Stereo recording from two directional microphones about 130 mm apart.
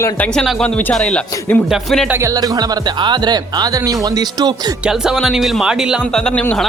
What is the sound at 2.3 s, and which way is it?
Speech, 30° right (ahead or behind).